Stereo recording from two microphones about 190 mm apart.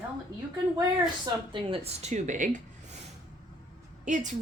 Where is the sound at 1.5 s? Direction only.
30° right (ahead or behind).